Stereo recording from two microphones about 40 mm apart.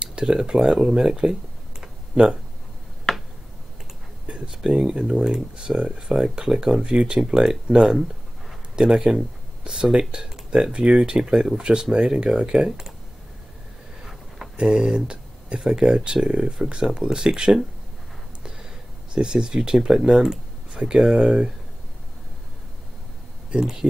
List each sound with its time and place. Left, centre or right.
0.0 s speech: right
4.3 s speech: centre
8.7 s speech: centre
14.6 s speech: centre
19.1 s speech: centre
23.5 s speech: centre